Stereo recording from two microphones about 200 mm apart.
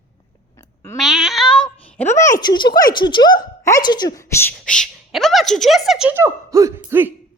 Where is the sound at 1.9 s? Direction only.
10° left (ahead or behind); by 7.1 s 10° right (ahead or behind).